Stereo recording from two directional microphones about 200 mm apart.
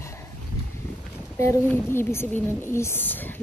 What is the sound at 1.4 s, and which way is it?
Speech, 15° left (ahead or behind).